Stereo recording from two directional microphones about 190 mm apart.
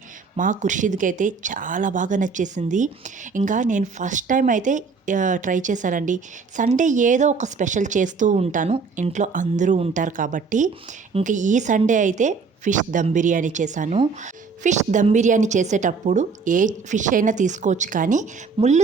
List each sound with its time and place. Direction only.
0.3 s speech: 40° right (ahead or behind)